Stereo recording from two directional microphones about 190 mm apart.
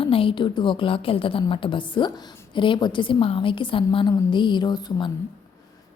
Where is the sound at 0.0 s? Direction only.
30° left (ahead or behind).